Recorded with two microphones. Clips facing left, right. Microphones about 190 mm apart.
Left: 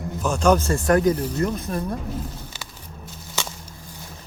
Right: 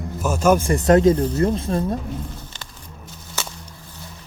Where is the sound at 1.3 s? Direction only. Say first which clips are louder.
Right 4 dB; 30° right (ahead or behind).